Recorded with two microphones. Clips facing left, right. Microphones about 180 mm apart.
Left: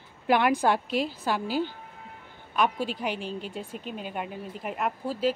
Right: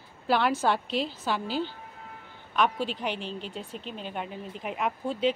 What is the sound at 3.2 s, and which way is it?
Speech, 45° left (ahead or behind).